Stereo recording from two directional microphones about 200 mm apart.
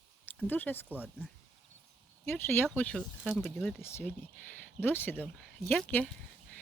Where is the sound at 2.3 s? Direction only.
10° left (ahead or behind).